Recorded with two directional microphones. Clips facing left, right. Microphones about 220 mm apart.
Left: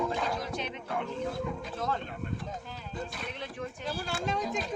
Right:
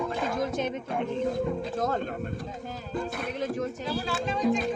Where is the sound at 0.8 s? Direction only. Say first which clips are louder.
Right 4 dB; 20° right (ahead or behind).